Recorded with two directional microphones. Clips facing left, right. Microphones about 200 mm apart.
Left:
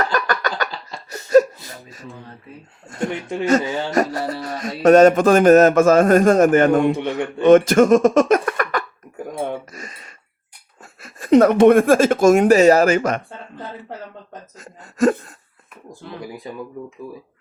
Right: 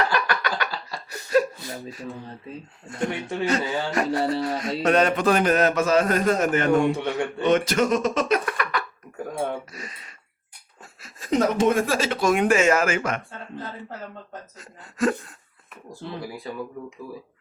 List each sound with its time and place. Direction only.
0.0 s a sound: 45° left (ahead or behind)
3.7 s speech: 20° left (ahead or behind)
4.1 s music: 25° right (ahead or behind)
4.8 s speech: 45° left (ahead or behind)
6.9 s speech: 15° left (ahead or behind)
7.4 s speech: 50° left (ahead or behind)
9.1 s a sound: 15° left (ahead or behind)
9.7 s a sound: 45° left (ahead or behind)
11.0 s speech: 60° left (ahead or behind); by 13.2 s 40° left (ahead or behind)
14.6 s speech: 40° left (ahead or behind)
15.9 s speech: 20° left (ahead or behind)